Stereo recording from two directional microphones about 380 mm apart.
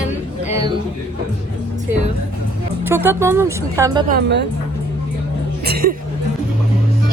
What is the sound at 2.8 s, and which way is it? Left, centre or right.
Speech, centre.